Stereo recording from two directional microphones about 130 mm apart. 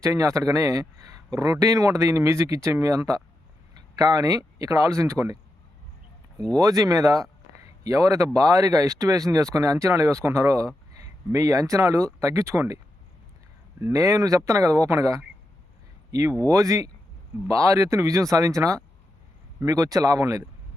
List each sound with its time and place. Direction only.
0.0 s speech: 25° right (ahead or behind)
6.6 s speech: 25° right (ahead or behind)
13.8 s speech: 25° right (ahead or behind)
16.5 s speech: 25° right (ahead or behind)